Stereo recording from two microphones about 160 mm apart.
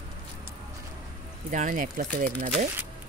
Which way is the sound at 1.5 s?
50° right (ahead or behind).